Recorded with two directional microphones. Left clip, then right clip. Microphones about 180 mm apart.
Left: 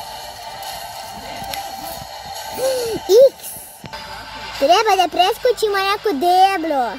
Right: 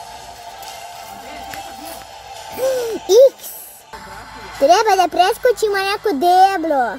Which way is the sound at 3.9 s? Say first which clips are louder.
Left 2 dB; 25° left (ahead or behind).